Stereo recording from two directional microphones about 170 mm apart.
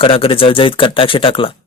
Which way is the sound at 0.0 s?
30° left (ahead or behind).